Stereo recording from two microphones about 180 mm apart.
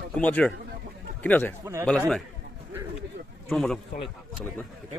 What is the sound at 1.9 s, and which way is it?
Speech, 5° left (ahead or behind).